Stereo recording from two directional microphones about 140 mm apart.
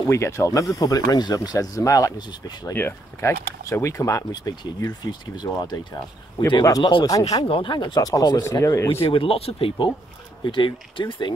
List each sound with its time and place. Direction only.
0.0 s speech: 20° left (ahead or behind)
2.7 s speech: 15° left (ahead or behind); by 7.2 s 35° left (ahead or behind)
7.2 s speech: 25° left (ahead or behind)
7.4 s speech: 35° left (ahead or behind); by 9.0 s 20° left (ahead or behind)
9.0 s speech: 40° left (ahead or behind)